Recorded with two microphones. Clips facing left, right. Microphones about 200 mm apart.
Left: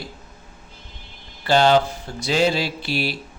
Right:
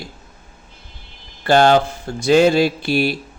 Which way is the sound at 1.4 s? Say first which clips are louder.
Right 3 dB; 50° right (ahead or behind).